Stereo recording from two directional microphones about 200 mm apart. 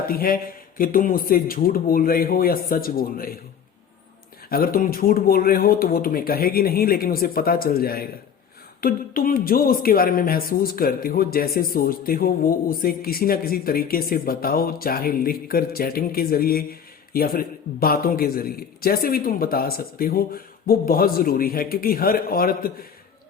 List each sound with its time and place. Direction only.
0.0 s a man's voice: 45° left (ahead or behind)
4.4 s speech: 45° left (ahead or behind)